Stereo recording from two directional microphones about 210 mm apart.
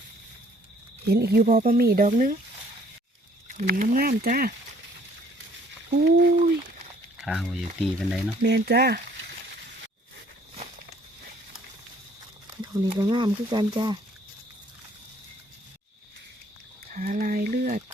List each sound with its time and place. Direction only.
1.0 s speech: 50° right (ahead or behind)
3.5 s speech: 40° right (ahead or behind)
6.1 s speech: 60° right (ahead or behind)
7.2 s speech: centre (ahead or behind)
8.4 s speech: 50° right (ahead or behind)
12.7 s speech: 20° right (ahead or behind)
16.9 s a sound: 35° right (ahead or behind)